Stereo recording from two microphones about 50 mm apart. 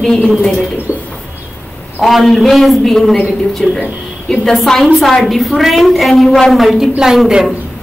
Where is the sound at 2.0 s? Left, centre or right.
Centre.